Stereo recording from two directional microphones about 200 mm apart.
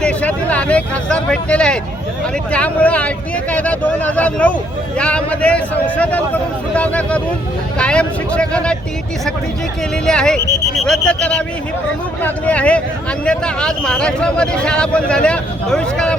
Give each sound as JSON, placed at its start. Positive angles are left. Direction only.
{"t": 0.0, "sound": "a man's voice", "side_deg": 5}
{"t": 10.1, "sound": "a man's voice", "side_deg": 5}